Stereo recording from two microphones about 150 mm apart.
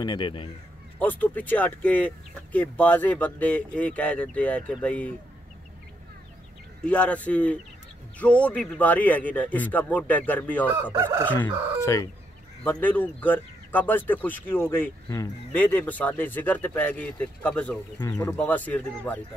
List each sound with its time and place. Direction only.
0.0 s speech: 30° left (ahead or behind)
0.9 s speech: 10° left (ahead or behind)
6.8 s speech: 10° left (ahead or behind)
10.7 s fowl: 15° right (ahead or behind)
11.4 s chicken: 20° left (ahead or behind)
12.6 s speech: 10° left (ahead or behind)
18.0 s speech: 20° left (ahead or behind)